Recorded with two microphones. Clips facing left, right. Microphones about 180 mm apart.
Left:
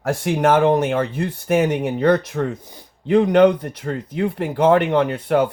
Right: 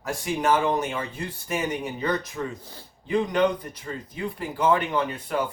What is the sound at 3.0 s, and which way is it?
Speech, 65° left (ahead or behind).